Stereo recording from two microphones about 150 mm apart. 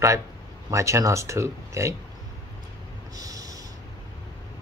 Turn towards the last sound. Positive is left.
turn(degrees=-25)  # may be behind; listen again after turning